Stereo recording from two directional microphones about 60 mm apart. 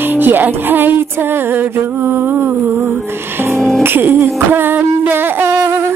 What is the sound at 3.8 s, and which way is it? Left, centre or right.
Music, right.